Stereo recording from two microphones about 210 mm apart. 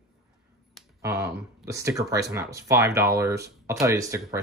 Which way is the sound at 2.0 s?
15° right (ahead or behind).